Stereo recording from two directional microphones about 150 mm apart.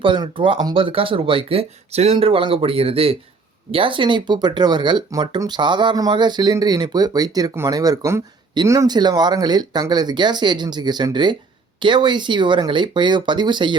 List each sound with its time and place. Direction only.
0.0 s speech: 35° right (ahead or behind)